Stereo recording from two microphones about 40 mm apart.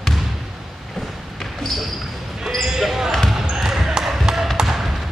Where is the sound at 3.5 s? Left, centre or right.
Centre.